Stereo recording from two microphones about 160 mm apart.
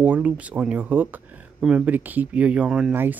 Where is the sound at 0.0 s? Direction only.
10° right (ahead or behind).